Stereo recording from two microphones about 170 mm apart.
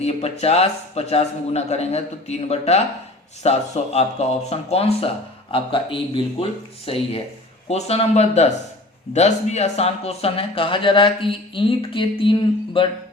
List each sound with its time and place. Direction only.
0.0 s speech: 40° left (ahead or behind)